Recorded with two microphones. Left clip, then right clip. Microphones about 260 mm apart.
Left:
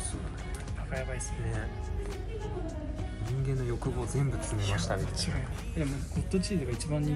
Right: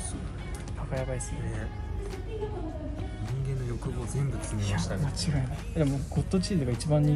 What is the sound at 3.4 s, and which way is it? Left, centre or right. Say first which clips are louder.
Speech: left 4 dB; centre.